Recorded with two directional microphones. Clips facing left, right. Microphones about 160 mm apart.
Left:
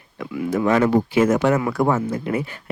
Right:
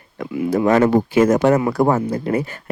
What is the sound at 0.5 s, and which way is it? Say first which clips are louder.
Speech: right 3 dB; 40° right (ahead or behind).